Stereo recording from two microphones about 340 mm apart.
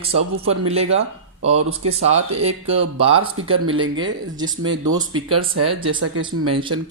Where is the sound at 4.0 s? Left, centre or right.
Centre.